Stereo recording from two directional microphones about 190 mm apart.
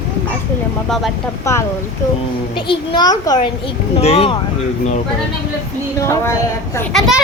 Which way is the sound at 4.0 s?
30° left (ahead or behind).